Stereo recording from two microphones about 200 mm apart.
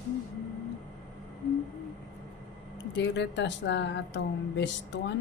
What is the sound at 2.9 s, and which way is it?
Speech, 65° left (ahead or behind).